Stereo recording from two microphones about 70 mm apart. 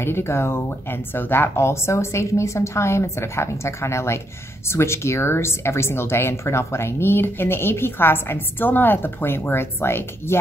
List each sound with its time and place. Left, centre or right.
0.0 s speech: left